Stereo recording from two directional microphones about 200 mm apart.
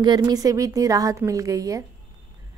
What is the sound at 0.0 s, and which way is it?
A woman's voice, 20° right (ahead or behind).